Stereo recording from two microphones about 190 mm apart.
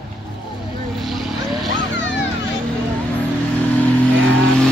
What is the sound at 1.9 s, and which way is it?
Vehicle, 70° left (ahead or behind).